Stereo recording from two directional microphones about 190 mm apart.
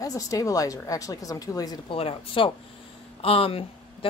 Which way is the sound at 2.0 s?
30° left (ahead or behind).